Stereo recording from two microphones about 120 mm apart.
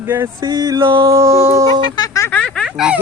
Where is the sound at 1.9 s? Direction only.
30° left (ahead or behind).